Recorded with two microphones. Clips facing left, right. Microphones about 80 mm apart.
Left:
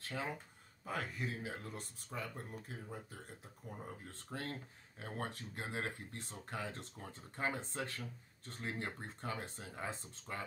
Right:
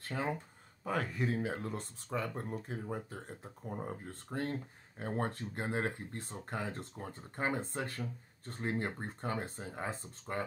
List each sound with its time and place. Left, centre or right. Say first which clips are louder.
0.1 s speech: right 6 dB; right
0.9 s speech: right 7 dB; right
3.6 s speech: right 8 dB; right
7.3 s speech: right 4 dB; right